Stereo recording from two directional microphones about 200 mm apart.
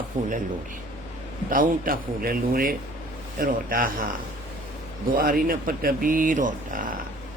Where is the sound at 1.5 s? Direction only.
45° right (ahead or behind).